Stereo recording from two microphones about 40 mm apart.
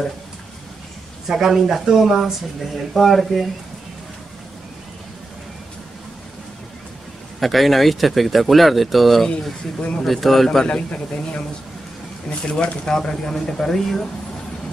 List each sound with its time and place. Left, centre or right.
1.2 s speech: centre
2.6 s speech: centre
7.3 s speech: centre
10.7 s a man's voice: left
12.4 s speech: left